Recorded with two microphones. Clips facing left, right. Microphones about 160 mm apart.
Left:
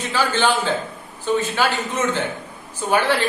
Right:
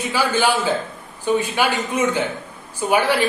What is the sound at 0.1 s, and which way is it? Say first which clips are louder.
A woman's voice: even; 10° right (ahead or behind).